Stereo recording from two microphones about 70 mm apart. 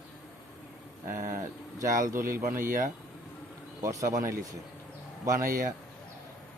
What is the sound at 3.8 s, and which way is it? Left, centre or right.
Speech, right.